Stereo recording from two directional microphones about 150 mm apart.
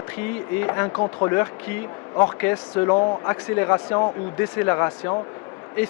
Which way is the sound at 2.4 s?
15° left (ahead or behind).